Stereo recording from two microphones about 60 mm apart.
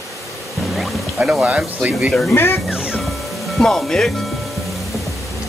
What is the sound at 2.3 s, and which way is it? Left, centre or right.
Speech, left.